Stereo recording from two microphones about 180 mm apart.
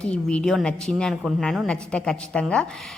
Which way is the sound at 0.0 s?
5° left (ahead or behind).